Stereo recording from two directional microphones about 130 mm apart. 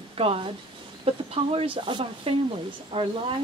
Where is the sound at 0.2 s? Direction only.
45° right (ahead or behind).